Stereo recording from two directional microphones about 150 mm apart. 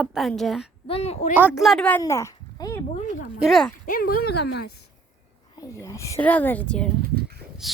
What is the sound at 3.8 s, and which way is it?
Speech, 75° left (ahead or behind).